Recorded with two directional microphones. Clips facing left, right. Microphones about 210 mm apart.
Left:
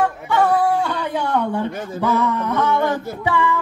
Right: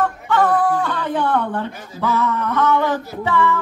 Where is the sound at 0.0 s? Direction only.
10° left (ahead or behind).